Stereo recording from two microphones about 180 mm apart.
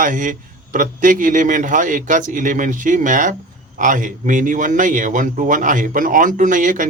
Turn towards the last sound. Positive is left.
turn(degrees=-45)  # may be behind; listen again after turning